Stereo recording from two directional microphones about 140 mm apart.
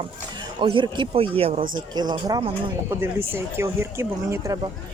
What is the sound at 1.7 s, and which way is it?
Speech, 30° right (ahead or behind).